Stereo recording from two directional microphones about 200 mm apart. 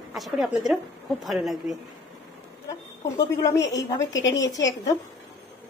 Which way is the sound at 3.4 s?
15° left (ahead or behind).